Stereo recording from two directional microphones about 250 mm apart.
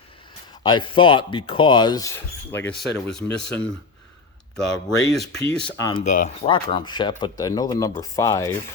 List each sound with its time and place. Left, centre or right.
0.6 s speech: centre
5.6 s speech: centre